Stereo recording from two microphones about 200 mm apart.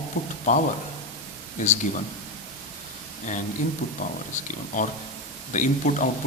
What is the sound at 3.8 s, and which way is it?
A man's voice, 40° left (ahead or behind).